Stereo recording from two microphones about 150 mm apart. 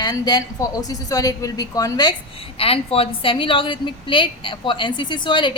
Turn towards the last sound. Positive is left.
turn(degrees=35)  # may be behind; listen again after turning